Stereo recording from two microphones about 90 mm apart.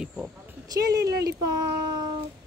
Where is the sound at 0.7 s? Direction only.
40° right (ahead or behind).